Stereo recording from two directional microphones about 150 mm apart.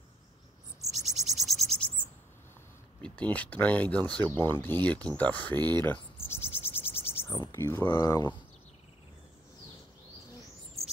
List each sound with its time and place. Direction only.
0.9 s cricket: centre (ahead or behind)
3.0 s speech: 10° left (ahead or behind)
5.8 s a sound: 15° left (ahead or behind)
6.4 s cricket: 40° left (ahead or behind)
7.2 s speech: 20° left (ahead or behind)